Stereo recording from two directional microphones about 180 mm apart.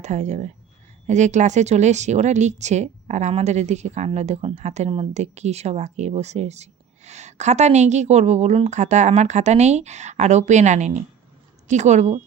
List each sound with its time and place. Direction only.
0.0 s speech: 40° right (ahead or behind)